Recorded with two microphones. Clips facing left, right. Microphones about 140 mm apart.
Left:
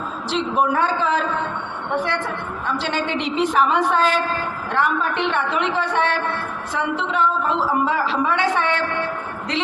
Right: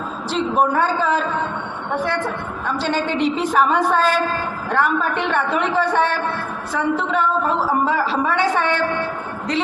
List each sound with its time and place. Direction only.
0.3 s a woman's voice: 40° right (ahead or behind)
2.8 s a woman's voice: 40° right (ahead or behind)